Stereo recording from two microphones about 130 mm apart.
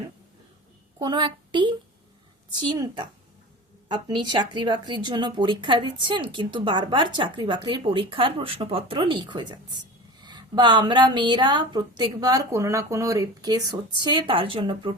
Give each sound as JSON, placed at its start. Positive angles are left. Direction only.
{"t": 0.9, "sound": "a woman's voice", "side_deg": -35}